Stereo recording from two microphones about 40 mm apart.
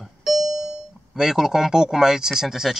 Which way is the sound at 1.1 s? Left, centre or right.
Centre.